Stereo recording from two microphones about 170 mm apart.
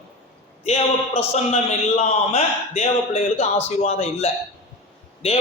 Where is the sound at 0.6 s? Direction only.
40° left (ahead or behind).